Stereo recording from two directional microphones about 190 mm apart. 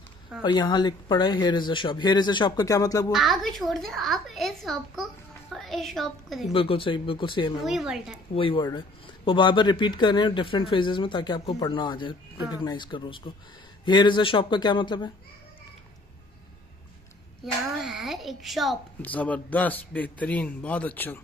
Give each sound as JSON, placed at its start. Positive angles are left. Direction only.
{"t": 0.4, "sound": "speech", "side_deg": 20}
{"t": 3.1, "sound": "a woman's voice", "side_deg": 0}
{"t": 6.5, "sound": "speech", "side_deg": 30}
{"t": 7.6, "sound": "a woman's voice", "side_deg": 0}
{"t": 8.4, "sound": "speech", "side_deg": 25}
{"t": 17.7, "sound": "a child's voice", "side_deg": 0}